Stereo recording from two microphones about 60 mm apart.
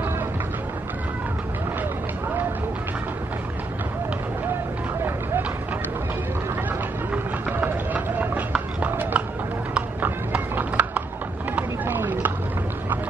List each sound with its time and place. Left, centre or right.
7.5 s run: right
8.8 s clip-clop: right
10.0 s horse: right
11.5 s boat: right